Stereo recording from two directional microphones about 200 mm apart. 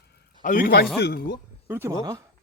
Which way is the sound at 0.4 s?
45° left (ahead or behind).